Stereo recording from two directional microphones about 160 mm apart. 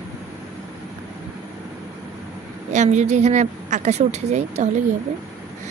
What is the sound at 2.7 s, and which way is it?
A woman's voice, 45° right (ahead or behind).